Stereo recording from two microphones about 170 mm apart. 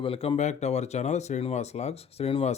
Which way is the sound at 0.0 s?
35° left (ahead or behind).